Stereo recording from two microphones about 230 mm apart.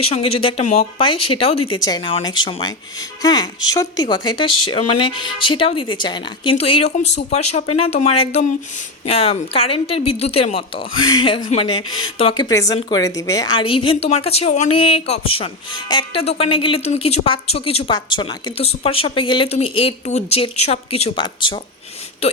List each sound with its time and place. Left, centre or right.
0.0 s a woman's voice: left